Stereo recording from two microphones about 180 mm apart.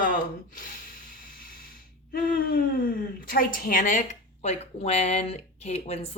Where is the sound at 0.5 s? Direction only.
50° left (ahead or behind).